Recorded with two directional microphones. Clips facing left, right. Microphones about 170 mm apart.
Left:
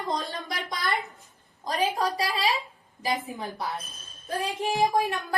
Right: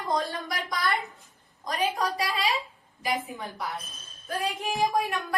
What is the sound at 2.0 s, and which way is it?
Speech, 30° left (ahead or behind).